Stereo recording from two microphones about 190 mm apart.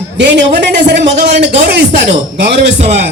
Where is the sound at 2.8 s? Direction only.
35° right (ahead or behind).